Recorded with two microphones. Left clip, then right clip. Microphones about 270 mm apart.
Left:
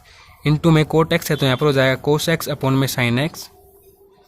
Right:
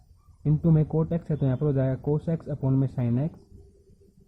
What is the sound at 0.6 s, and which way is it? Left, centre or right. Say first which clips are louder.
Speech: left 12 dB; left.